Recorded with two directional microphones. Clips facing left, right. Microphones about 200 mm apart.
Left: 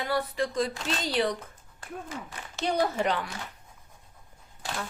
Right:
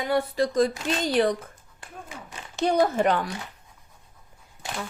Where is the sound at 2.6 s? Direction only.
45° right (ahead or behind).